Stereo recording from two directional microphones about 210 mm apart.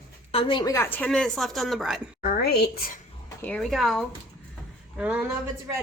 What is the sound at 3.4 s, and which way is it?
A woman's voice, 5° left (ahead or behind).